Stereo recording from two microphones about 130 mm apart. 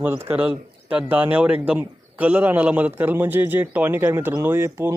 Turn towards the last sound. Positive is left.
turn(degrees=-20)  # may be behind; listen again after turning